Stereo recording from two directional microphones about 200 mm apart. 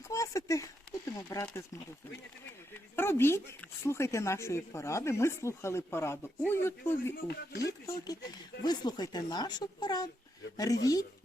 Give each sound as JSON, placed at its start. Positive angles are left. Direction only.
{"t": 0.1, "sound": "a sound", "side_deg": 15}
{"t": 1.0, "sound": "speech", "side_deg": 15}
{"t": 2.9, "sound": "speech", "side_deg": 10}
{"t": 7.3, "sound": "speech", "side_deg": 55}
{"t": 7.9, "sound": "speech", "side_deg": 20}